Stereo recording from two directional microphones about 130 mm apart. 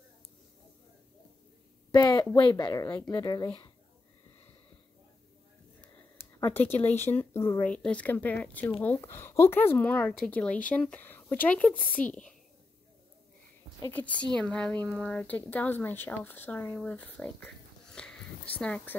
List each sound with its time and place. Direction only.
1.9 s speech: 35° left (ahead or behind)
5.8 s a sound: 15° left (ahead or behind)
7.0 s a woman's voice: 15° left (ahead or behind)
13.7 s a woman's voice: 15° left (ahead or behind)